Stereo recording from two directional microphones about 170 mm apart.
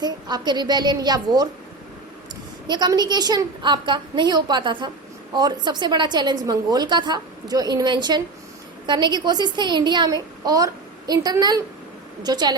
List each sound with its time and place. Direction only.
0.0 s a woman's voice: 25° right (ahead or behind)
2.6 s a woman's voice: 25° right (ahead or behind)